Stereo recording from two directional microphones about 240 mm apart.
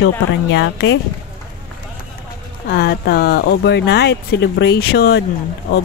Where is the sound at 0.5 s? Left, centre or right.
Left.